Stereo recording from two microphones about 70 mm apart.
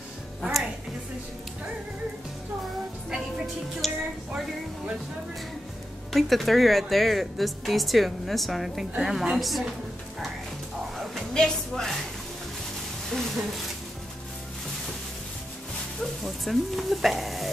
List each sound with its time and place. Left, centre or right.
0.4 s music: centre
3.8 s speech: centre
6.1 s speech: centre
11.1 s a sound: centre
13.1 s speech: centre
16.0 s speech: centre